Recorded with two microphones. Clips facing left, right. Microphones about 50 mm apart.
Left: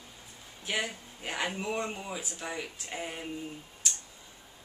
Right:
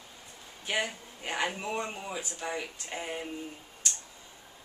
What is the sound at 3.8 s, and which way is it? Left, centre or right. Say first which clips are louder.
Clicking: even; centre.